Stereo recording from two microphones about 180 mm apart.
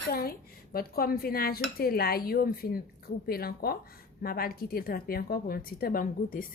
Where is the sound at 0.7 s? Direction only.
55° left (ahead or behind).